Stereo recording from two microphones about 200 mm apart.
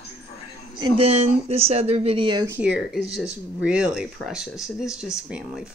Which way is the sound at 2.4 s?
10° right (ahead or behind).